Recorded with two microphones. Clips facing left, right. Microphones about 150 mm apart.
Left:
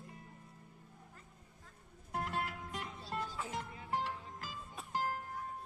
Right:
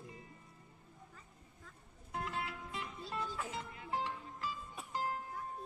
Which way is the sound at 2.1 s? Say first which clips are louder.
Left 2 dB; 60° left (ahead or behind).